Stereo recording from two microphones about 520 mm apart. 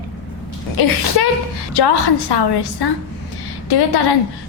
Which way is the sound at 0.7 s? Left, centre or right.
Left.